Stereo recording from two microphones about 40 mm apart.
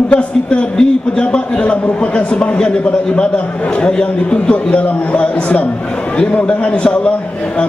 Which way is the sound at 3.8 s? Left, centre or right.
Left.